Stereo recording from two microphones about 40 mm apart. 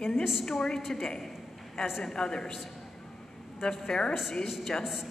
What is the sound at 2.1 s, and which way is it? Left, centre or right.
Speech, centre.